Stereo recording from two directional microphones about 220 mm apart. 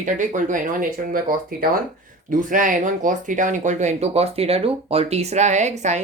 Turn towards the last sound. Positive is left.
turn(degrees=-30)  # may be behind; listen again after turning